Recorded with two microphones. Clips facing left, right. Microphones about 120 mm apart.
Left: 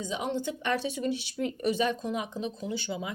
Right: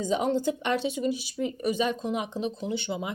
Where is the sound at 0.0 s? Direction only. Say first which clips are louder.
Right 6 dB; 45° right (ahead or behind).